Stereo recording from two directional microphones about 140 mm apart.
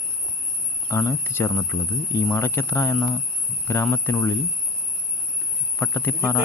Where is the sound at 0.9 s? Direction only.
15° left (ahead or behind).